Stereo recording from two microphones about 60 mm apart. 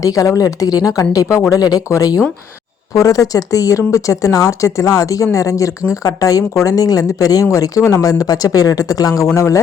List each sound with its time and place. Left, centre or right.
0.0 s speech: left
1.5 s speech: left
2.9 s a woman's voice: left
7.5 s speech: left
9.2 s speech: left